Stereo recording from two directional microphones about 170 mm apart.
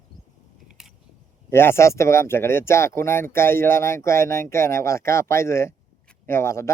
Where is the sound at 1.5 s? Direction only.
15° left (ahead or behind).